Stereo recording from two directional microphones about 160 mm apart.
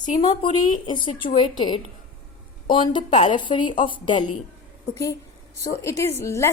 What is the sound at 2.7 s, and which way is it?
A woman's voice, 30° left (ahead or behind).